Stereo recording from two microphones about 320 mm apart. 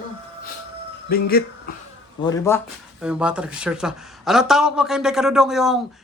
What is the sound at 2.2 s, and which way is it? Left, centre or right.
Speech, centre.